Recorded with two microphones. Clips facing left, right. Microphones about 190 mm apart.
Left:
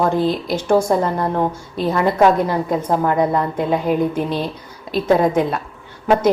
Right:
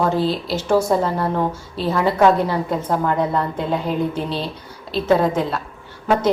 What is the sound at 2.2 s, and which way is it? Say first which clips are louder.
A woman's voice: even; 10° left (ahead or behind).